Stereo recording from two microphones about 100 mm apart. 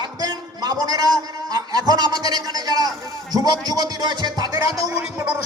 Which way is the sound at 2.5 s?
40° right (ahead or behind).